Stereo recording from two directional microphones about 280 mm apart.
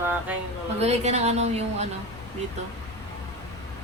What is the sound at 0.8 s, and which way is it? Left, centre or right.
A woman's voice, right.